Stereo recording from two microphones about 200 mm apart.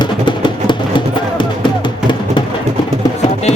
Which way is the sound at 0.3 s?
25° left (ahead or behind).